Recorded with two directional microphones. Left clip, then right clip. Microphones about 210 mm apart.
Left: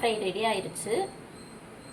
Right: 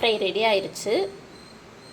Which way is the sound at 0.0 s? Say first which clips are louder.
Right 6 dB; 55° right (ahead or behind).